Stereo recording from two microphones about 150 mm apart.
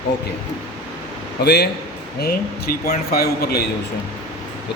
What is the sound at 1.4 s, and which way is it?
Speech, 90° left.